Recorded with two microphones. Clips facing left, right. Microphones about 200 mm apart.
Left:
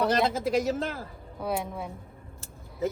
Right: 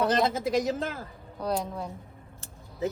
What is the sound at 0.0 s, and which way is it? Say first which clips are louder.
Speech: even; centre (ahead or behind).